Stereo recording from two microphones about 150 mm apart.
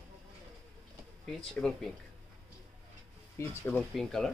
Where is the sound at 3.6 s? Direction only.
5° left (ahead or behind).